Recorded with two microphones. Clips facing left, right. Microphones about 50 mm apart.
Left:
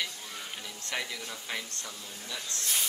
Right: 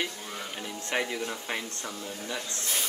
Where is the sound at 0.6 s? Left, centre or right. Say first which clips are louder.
Right 6 dB; right.